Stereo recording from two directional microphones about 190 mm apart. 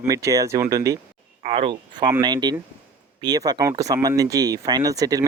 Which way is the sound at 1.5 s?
30° right (ahead or behind).